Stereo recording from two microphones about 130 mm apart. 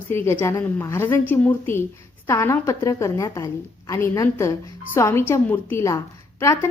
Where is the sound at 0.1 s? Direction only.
20° left (ahead or behind).